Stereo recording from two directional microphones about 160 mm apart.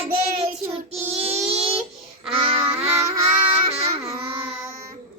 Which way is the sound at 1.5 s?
35° right (ahead or behind).